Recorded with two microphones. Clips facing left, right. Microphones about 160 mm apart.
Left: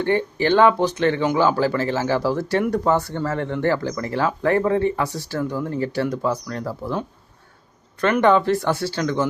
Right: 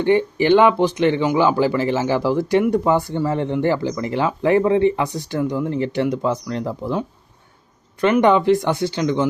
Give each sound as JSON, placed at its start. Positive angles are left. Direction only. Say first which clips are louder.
{"t": 0.0, "sound": "speech", "louder": "right 4 dB", "side_deg": -15}
{"t": 8.0, "sound": "speech", "louder": "right 2 dB", "side_deg": -15}